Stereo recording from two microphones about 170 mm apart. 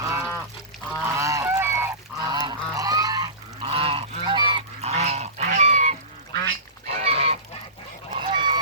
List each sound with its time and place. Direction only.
0.0 s duck: 15° right (ahead or behind)
1.0 s goose: 15° right (ahead or behind)
3.6 s goose: 35° right (ahead or behind)